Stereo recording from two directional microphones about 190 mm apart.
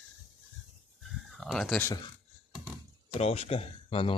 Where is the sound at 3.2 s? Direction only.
30° left (ahead or behind).